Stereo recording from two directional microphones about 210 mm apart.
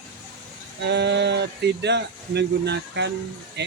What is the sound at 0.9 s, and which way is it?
Speech, 55° right (ahead or behind).